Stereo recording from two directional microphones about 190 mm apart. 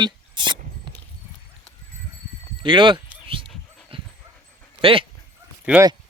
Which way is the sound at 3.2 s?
25° right (ahead or behind).